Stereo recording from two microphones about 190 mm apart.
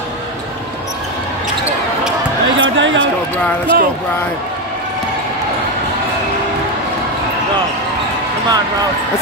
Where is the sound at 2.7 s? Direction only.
75° right (ahead or behind).